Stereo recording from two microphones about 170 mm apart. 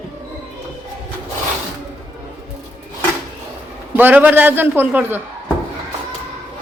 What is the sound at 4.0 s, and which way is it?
A man's voice, 10° right (ahead or behind).